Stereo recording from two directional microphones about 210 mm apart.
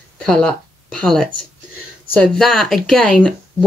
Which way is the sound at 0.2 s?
5° left (ahead or behind).